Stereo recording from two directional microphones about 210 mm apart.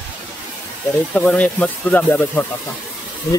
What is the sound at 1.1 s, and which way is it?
Speech, 5° left (ahead or behind).